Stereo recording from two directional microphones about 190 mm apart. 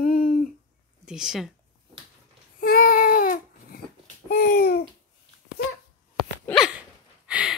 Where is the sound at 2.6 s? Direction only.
50° left (ahead or behind).